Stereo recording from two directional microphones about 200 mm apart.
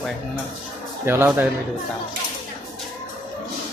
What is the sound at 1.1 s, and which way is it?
Speech, 10° right (ahead or behind).